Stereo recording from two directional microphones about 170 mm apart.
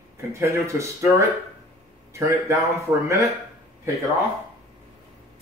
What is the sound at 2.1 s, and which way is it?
Speech, 15° right (ahead or behind).